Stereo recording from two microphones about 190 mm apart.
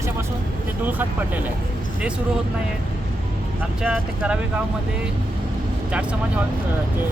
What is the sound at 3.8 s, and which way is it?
Speech, 5° right (ahead or behind).